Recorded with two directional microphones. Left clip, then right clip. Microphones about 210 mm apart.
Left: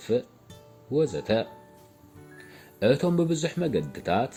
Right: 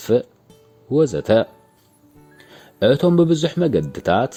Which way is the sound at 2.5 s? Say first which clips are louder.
Right 7 dB; 40° right (ahead or behind).